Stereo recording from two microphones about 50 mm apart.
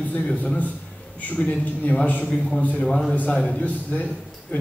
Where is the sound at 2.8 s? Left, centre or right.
Centre.